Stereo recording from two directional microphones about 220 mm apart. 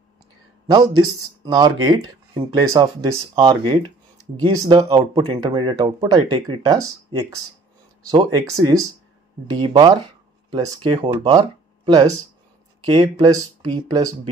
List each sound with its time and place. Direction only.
0.7 s speech: 20° right (ahead or behind)